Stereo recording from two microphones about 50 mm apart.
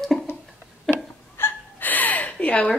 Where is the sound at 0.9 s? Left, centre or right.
Centre.